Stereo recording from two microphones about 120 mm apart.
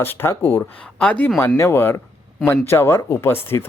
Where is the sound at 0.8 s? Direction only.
10° left (ahead or behind).